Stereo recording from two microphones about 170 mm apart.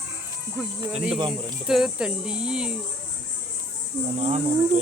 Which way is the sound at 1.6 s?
5° right (ahead or behind).